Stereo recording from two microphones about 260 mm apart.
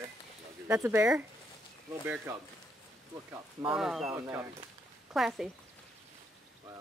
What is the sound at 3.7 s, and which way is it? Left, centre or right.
Speech, centre.